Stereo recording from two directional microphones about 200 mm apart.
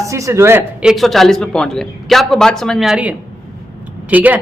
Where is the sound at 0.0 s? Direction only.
15° right (ahead or behind).